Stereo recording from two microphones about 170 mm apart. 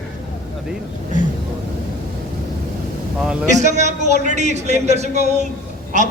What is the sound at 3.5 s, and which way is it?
A man's voice, 45° right (ahead or behind).